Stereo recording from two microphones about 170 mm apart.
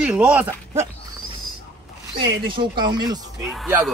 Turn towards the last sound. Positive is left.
turn(degrees=0)  # may be behind; listen again after turning